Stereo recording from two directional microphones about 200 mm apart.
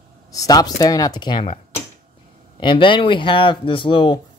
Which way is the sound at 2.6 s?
25° left (ahead or behind).